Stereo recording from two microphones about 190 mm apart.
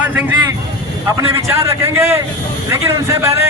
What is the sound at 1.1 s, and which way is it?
A man's voice, 15° right (ahead or behind).